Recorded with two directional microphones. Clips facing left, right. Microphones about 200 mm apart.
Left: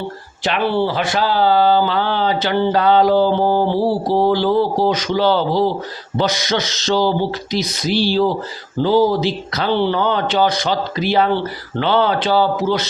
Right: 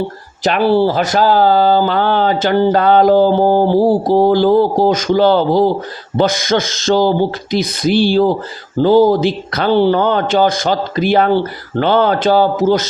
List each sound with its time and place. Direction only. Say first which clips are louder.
0.4 s speech: right 6 dB; 40° right (ahead or behind)